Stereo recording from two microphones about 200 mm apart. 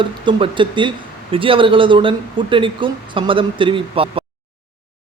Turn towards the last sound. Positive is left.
turn(degrees=-25)  # may be behind; listen again after turning